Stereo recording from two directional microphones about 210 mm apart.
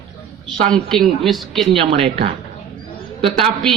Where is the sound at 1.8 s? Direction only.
25° right (ahead or behind).